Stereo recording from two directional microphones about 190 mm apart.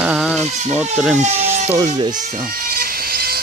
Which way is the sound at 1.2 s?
35° right (ahead or behind).